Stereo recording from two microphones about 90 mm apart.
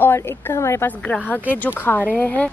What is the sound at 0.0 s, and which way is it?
Speech, 30° left (ahead or behind).